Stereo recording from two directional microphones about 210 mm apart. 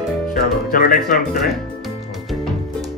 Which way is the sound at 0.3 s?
40° left (ahead or behind).